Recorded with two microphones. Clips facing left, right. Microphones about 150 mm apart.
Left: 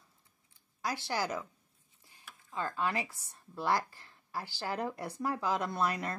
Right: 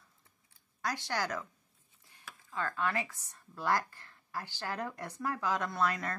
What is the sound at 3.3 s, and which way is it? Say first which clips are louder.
Speech: left 1 dB; 30° left (ahead or behind).